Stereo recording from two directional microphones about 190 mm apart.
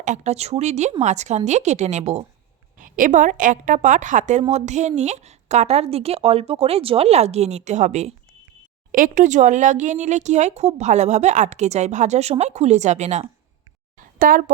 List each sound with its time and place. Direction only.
0.0 s a woman's voice: 40° right (ahead or behind)
2.7 s a woman's voice: 45° right (ahead or behind)
14.2 s speech: 45° right (ahead or behind)